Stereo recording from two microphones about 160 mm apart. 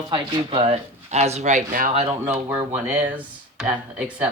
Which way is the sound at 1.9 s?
40° right (ahead or behind).